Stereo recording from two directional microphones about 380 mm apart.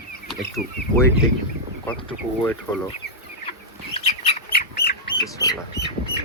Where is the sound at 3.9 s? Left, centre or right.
Centre.